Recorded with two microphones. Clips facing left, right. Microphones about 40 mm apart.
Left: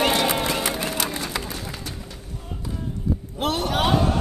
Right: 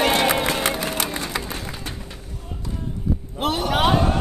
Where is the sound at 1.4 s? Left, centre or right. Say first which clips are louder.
Right 2 dB; right.